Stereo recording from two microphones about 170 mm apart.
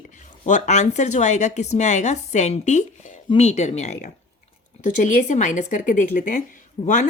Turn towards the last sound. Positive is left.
turn(degrees=50)  # may be behind; listen again after turning